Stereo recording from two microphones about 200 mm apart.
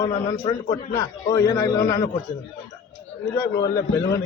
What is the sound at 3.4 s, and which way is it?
Speech, 15° left (ahead or behind).